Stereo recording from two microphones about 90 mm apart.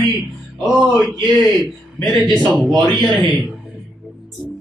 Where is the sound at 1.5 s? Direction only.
Centre (ahead or behind).